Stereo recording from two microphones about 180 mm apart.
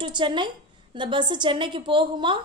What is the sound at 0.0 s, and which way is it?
A woman's voice, 25° right (ahead or behind).